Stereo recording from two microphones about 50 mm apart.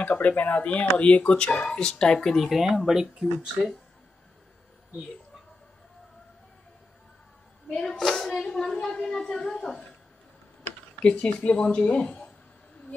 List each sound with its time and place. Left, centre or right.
0.0 s speech: left
0.7 s speech: left
2.3 s speech: centre
7.7 s speech: centre
11.0 s speech: centre